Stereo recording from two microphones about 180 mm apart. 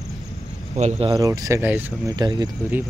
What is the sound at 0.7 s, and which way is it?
Speech, 35° right (ahead or behind).